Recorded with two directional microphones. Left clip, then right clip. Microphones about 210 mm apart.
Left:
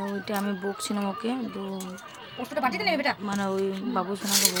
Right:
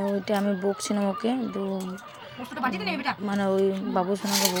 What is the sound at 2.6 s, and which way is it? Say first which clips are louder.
Speech: left 3 dB; 25° left (ahead or behind).